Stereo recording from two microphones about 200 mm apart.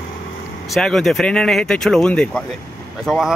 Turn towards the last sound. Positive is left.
turn(degrees=0)  # may be behind; listen again after turning